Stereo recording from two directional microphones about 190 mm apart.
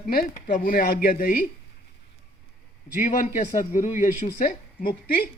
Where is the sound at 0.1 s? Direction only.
50° left (ahead or behind).